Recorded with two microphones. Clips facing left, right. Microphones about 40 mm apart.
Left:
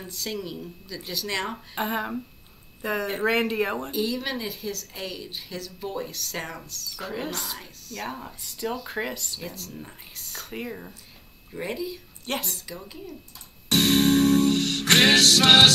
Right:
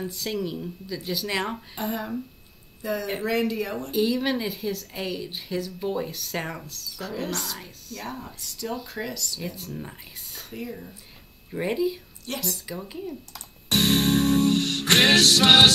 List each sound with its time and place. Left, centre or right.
0.0 s speech: centre
1.8 s speech: left
3.9 s speech: centre
7.0 s speech: centre
7.5 s speech: centre
8.0 s speech: centre; by 9.4 s left
9.7 s speech: centre
10.5 s speech: left
11.5 s speech: centre
12.3 s speech: left
12.6 s speech: centre
13.7 s music: centre
15.0 s speech: centre